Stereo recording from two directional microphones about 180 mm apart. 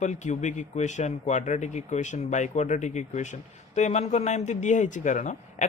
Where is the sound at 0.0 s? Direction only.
40° left (ahead or behind).